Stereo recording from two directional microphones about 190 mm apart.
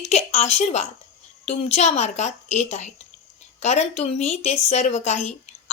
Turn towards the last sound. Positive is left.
turn(degrees=35)  # may be behind; listen again after turning